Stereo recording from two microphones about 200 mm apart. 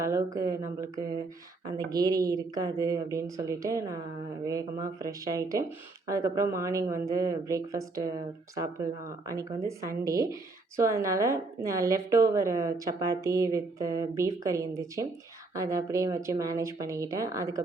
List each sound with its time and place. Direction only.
0.0 s a woman's voice: 15° right (ahead or behind)
9.3 s a woman's voice: 15° right (ahead or behind)